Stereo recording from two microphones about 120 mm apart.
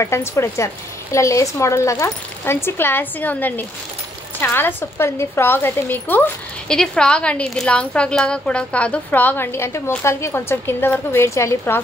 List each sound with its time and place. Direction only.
0.0 s a woman's voice: 20° left (ahead or behind)